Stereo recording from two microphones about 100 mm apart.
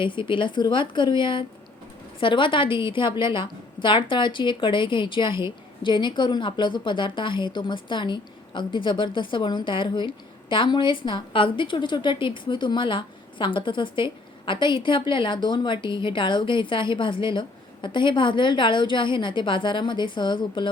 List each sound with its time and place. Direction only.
0.0 s a woman's voice: 55° left (ahead or behind)